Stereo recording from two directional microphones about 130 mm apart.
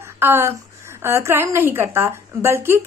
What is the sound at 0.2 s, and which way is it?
A woman's voice, 20° right (ahead or behind).